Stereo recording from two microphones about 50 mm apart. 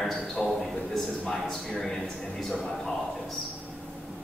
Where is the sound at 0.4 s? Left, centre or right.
Centre.